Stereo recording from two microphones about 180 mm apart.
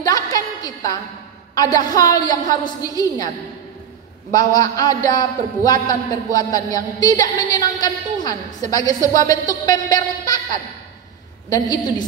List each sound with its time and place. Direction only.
0.0 s a sound: 20° left (ahead or behind)
1.5 s a man's voice: 20° left (ahead or behind)
4.6 s a man's voice: 20° left (ahead or behind)
11.5 s a man's voice: 20° left (ahead or behind)